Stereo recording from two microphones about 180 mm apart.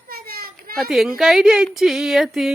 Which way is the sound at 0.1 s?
55° right (ahead or behind).